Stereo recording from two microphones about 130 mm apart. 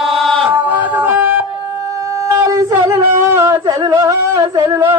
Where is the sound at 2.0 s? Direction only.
25° right (ahead or behind).